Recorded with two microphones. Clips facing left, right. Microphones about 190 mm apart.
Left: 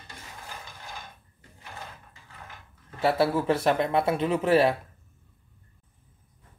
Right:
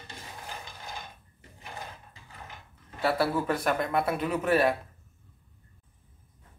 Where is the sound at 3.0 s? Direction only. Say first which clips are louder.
Left 3 dB; 25° left (ahead or behind).